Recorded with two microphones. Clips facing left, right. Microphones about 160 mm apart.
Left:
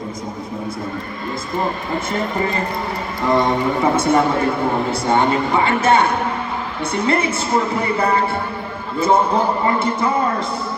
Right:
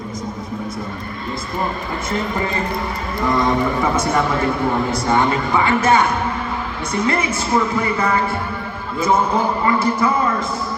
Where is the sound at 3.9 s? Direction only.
30° left (ahead or behind).